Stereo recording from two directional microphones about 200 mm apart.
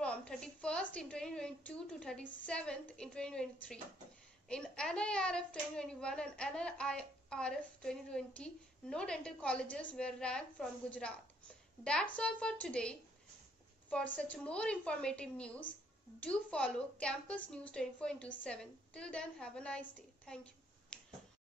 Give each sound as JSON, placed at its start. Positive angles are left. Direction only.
{"t": 0.0, "sound": "a woman's voice", "side_deg": 5}
{"t": 4.5, "sound": "speech", "side_deg": 5}
{"t": 14.1, "sound": "speech", "side_deg": 5}
{"t": 20.9, "sound": "finger snapping", "side_deg": 5}